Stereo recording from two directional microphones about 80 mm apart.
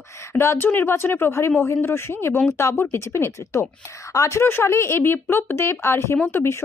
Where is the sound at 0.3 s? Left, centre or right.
Left.